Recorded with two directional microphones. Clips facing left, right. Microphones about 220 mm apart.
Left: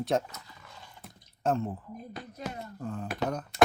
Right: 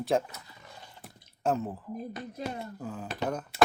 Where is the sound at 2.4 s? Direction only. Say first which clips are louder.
Right 1 dB; centre (ahead or behind).